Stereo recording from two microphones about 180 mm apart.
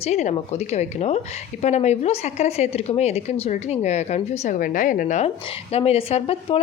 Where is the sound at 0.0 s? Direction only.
40° left (ahead or behind).